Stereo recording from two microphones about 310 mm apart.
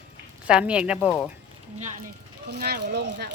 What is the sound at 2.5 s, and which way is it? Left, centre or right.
Speech, right.